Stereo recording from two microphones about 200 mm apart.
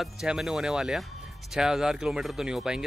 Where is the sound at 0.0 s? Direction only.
Centre (ahead or behind).